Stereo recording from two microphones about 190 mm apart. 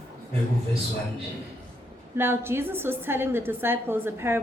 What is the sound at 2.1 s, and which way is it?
Speech, 10° right (ahead or behind).